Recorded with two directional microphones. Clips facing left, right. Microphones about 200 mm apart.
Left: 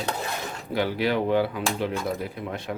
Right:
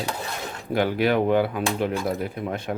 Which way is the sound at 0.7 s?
50° right (ahead or behind).